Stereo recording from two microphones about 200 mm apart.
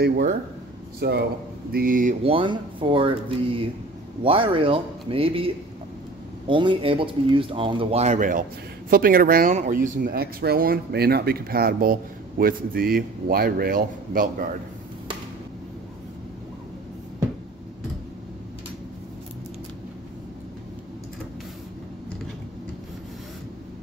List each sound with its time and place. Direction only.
0.0 s a man's voice: 50° right (ahead or behind)
2.2 s speech: 25° right (ahead or behind); by 14.3 s 45° right (ahead or behind)